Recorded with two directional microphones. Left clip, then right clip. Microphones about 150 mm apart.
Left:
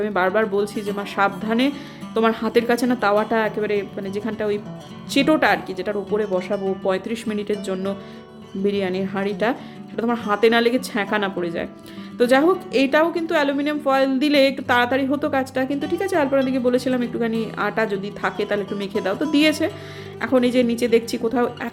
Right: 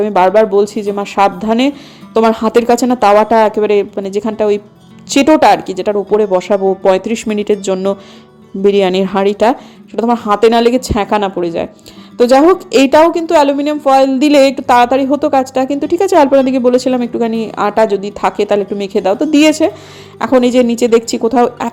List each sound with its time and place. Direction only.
0.0 s speech: 35° right (ahead or behind)